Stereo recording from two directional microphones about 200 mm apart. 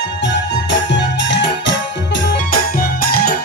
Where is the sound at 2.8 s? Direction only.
50° left (ahead or behind).